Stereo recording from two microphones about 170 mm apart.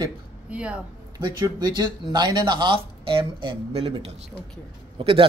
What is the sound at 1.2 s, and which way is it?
Speech, 25° right (ahead or behind).